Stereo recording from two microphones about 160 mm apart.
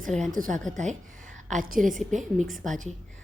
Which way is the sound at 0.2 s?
55° right (ahead or behind).